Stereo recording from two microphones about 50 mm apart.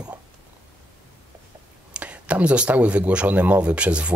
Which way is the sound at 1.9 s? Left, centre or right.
Right.